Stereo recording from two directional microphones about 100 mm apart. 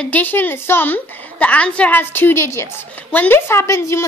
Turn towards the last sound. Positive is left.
turn(degrees=30)  # may be behind; listen again after turning